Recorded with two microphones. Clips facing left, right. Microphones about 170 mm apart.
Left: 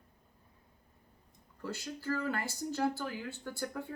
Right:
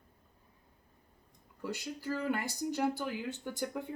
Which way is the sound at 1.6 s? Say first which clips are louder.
Right 1 dB; 15° right (ahead or behind).